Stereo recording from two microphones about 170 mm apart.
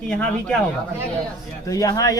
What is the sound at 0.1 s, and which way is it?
Speech, 5° left (ahead or behind).